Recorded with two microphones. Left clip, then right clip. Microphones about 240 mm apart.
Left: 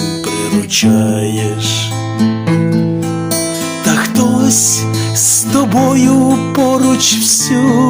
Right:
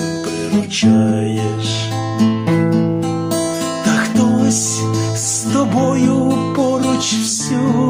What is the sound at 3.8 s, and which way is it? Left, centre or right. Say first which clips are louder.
Music: left 4 dB; left.